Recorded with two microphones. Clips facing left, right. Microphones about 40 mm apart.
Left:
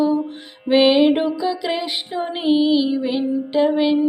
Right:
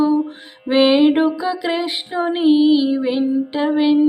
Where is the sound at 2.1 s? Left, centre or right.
Right.